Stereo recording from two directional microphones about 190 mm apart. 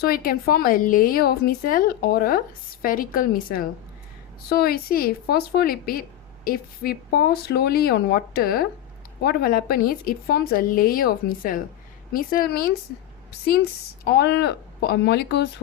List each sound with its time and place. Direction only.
0.0 s a woman's voice: 50° left (ahead or behind)